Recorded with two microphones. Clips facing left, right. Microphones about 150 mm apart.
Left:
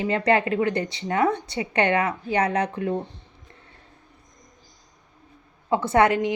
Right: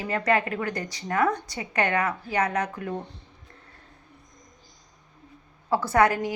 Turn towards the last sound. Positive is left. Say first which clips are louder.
# left 2 dB
turn(degrees=25)  # may be behind; listen again after turning